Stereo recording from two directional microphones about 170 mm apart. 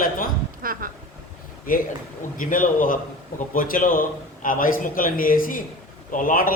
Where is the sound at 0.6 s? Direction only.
55° right (ahead or behind).